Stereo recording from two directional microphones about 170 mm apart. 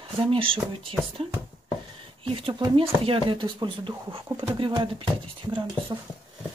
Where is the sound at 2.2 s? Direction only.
30° right (ahead or behind).